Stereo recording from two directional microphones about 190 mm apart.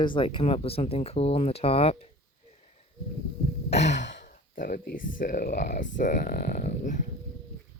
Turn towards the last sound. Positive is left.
turn(degrees=40)  # may be behind; listen again after turning